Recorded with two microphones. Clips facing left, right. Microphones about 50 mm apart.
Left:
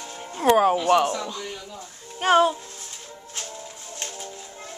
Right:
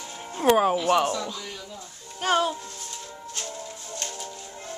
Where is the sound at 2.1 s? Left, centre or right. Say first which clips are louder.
Left 5 dB; left.